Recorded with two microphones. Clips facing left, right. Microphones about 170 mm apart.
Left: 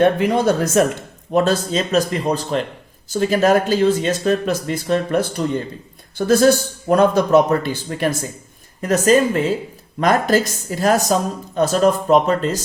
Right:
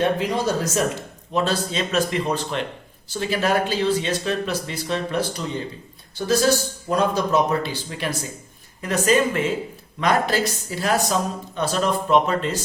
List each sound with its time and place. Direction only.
0.0 s speech: 55° left (ahead or behind)
1.3 s speech: 45° left (ahead or behind)